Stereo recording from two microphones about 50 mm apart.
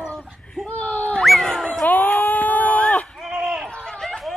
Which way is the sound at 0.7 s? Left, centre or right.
Left.